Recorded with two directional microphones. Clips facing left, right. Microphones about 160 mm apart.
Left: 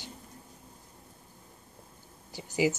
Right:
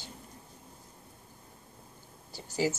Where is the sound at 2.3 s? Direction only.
15° left (ahead or behind).